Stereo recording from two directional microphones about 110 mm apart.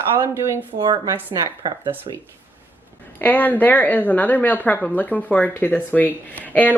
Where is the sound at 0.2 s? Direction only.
25° right (ahead or behind).